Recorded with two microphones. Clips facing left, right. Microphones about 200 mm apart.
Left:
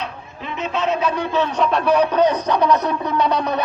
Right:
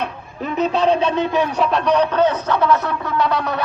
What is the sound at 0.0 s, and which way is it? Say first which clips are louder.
A man's voice: right 5 dB; 45° right (ahead or behind).